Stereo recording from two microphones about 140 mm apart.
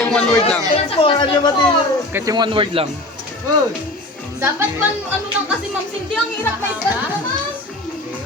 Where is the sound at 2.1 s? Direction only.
25° right (ahead or behind).